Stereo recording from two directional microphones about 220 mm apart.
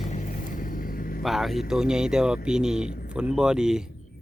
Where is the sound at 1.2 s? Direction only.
Centre (ahead or behind).